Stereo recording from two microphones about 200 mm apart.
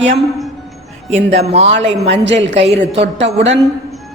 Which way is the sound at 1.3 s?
30° right (ahead or behind).